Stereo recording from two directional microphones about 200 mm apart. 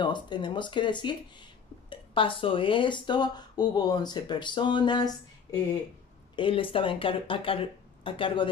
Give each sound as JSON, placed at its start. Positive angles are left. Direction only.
{"t": 0.0, "sound": "speech", "side_deg": 25}